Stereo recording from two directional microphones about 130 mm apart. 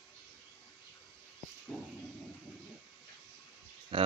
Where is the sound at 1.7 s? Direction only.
10° left (ahead or behind).